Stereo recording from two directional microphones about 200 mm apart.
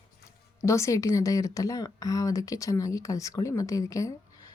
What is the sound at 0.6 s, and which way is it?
Speech, 15° left (ahead or behind).